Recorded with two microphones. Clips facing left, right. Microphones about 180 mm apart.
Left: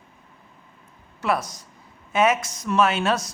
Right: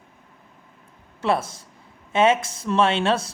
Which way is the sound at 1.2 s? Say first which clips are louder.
Right 2 dB; 25° right (ahead or behind).